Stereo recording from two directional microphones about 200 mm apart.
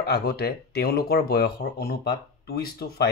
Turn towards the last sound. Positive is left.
turn(degrees=50)  # may be behind; listen again after turning